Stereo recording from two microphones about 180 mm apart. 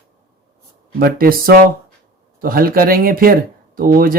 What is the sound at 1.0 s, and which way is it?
Speech, 55° right (ahead or behind).